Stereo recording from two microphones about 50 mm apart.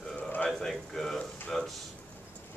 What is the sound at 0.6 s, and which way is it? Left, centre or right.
Speech, centre.